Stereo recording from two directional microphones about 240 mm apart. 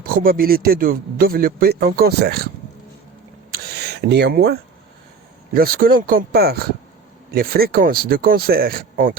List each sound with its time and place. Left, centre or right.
0.0 s speech: right
3.5 s a sound: right
5.5 s speech: right